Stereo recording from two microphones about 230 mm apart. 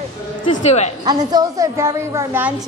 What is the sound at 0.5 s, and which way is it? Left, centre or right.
Speech, left.